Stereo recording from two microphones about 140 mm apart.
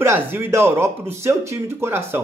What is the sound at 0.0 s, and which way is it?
Speech, 15° right (ahead or behind).